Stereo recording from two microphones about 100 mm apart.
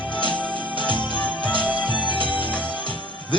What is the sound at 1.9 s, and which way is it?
Music, 55° left (ahead or behind).